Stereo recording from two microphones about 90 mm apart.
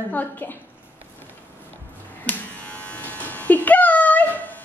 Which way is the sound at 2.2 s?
15° left (ahead or behind).